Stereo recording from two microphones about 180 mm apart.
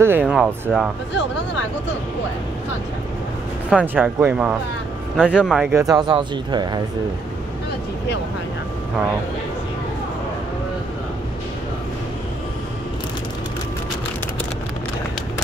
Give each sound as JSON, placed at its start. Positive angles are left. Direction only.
{"t": 0.0, "sound": "speech", "side_deg": -10}
{"t": 3.7, "sound": "speech", "side_deg": -10}
{"t": 5.8, "sound": "speech", "side_deg": -20}